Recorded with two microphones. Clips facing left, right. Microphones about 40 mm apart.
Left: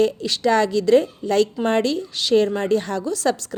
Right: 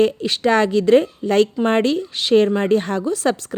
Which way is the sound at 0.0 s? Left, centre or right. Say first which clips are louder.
Right 2 dB; right.